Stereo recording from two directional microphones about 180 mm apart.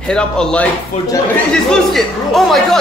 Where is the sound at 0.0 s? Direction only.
5° left (ahead or behind).